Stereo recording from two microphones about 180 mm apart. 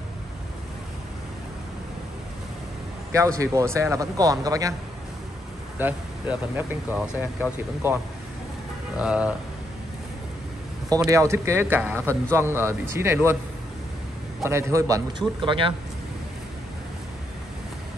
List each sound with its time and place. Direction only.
3.3 s speech: 15° right (ahead or behind)
5.8 s speech: 10° right (ahead or behind)
11.1 s speech: 15° right (ahead or behind)
14.4 s speech: 15° right (ahead or behind)